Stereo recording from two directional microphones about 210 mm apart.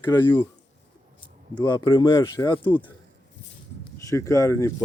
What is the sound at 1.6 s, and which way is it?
Speech, 20° left (ahead or behind).